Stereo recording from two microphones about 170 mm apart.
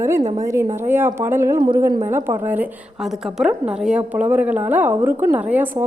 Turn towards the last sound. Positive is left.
turn(degrees=-10)  # may be behind; listen again after turning